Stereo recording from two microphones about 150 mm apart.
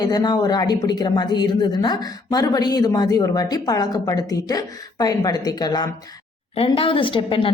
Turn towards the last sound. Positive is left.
turn(degrees=35)  # may be behind; listen again after turning